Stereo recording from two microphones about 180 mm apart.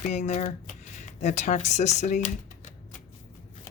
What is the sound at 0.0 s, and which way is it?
Speech, 40° left (ahead or behind).